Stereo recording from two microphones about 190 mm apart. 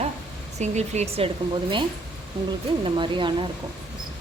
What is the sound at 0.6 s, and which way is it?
Speech, 35° right (ahead or behind).